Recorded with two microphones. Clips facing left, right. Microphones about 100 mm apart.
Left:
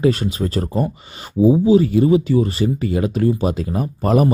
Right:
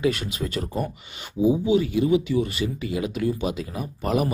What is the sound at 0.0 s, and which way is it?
Speech, 35° left (ahead or behind).